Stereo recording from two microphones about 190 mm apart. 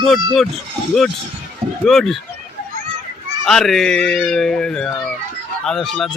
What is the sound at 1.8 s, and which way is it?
Speech, centre (ahead or behind).